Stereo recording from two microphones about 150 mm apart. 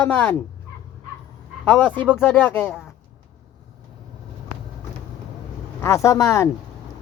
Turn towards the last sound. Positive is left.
turn(degrees=20)  # may be behind; listen again after turning